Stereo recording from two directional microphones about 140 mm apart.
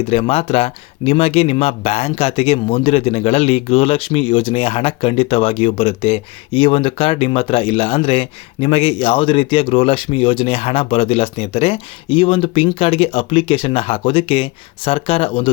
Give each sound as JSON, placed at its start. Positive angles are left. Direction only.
{"t": 0.1, "sound": "speech", "side_deg": 45}